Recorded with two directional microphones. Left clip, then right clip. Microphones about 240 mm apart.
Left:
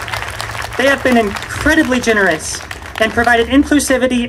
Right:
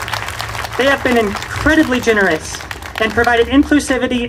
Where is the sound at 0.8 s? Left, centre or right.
Left.